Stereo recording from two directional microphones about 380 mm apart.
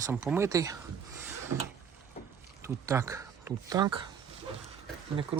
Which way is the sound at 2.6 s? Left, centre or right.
Centre.